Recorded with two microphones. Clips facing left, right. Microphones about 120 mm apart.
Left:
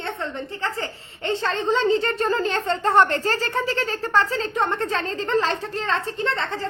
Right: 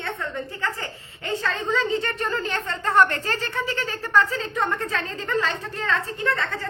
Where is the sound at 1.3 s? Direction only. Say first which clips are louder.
Left 3 dB; 30° left (ahead or behind).